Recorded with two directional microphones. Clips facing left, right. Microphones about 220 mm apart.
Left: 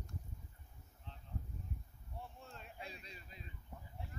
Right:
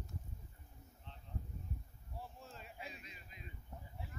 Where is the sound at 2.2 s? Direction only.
Centre (ahead or behind).